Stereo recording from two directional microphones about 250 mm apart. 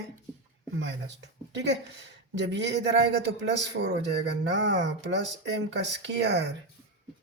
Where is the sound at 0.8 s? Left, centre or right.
Right.